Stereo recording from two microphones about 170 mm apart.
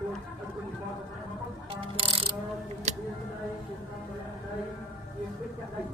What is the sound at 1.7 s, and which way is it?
Mechanisms, 30° right (ahead or behind).